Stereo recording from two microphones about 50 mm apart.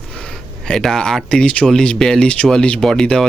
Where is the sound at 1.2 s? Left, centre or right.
Left.